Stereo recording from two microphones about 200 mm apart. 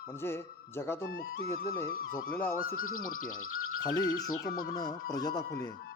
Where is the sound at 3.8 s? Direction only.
20° left (ahead or behind).